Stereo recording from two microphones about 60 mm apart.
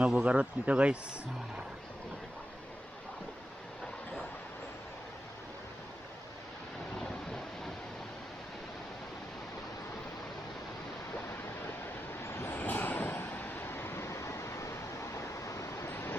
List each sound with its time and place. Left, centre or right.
0.1 s speech: centre
12.2 s vehicle: left
12.5 s vehicle: left
15.9 s vehicle: left